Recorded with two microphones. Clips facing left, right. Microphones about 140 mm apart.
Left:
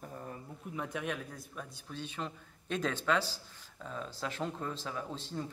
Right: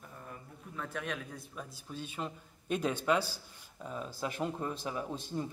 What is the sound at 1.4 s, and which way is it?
Speech, 5° right (ahead or behind).